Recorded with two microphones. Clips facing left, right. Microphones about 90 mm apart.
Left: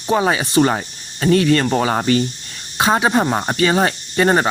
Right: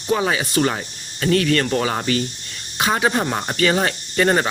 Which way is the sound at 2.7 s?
25° left (ahead or behind).